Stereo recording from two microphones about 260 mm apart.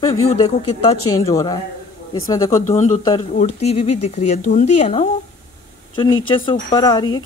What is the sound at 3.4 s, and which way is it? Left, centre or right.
Speech, left.